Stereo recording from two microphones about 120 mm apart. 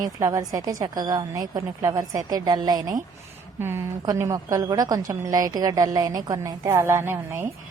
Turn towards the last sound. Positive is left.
turn(degrees=-20)  # may be behind; listen again after turning